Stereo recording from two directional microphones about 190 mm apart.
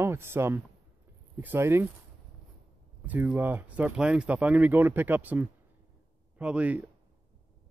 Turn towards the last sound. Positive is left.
turn(degrees=-5)  # may be behind; listen again after turning